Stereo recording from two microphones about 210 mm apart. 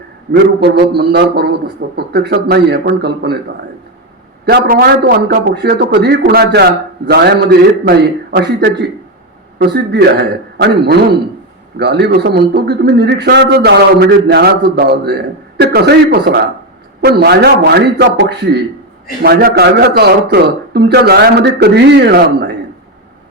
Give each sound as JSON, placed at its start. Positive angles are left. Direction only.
{"t": 0.3, "sound": "a man's voice", "side_deg": -50}
{"t": 4.4, "sound": "a man's voice", "side_deg": -45}
{"t": 9.6, "sound": "a man's voice", "side_deg": -50}